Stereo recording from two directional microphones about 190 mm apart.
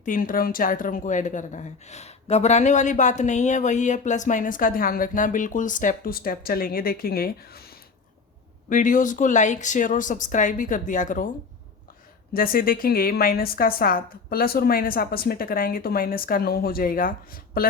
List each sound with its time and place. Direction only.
0.0 s a woman's voice: 45° left (ahead or behind)
8.7 s a woman's voice: 45° left (ahead or behind)
12.3 s a woman's voice: 50° left (ahead or behind)